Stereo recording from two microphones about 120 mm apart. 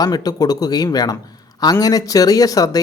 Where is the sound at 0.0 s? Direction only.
35° left (ahead or behind).